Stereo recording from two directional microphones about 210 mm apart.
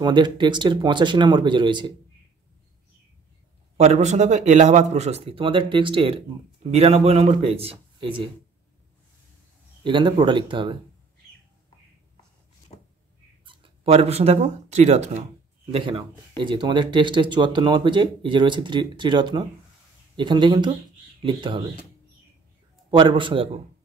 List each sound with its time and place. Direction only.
0.0 s speech: 20° right (ahead or behind)
3.7 s speech: 30° right (ahead or behind)
9.8 s speech: 25° right (ahead or behind)
13.5 s speech: 25° right (ahead or behind)
22.8 s speech: 25° right (ahead or behind)